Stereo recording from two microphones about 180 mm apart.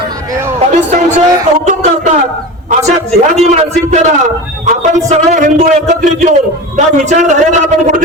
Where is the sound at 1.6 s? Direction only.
45° right (ahead or behind).